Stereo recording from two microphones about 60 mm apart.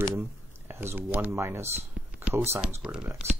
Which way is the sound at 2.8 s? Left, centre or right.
Centre.